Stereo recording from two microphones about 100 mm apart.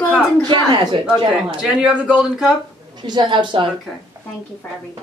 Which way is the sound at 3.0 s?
50° right (ahead or behind).